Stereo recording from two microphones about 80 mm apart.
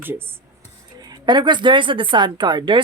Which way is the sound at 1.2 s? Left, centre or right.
Right.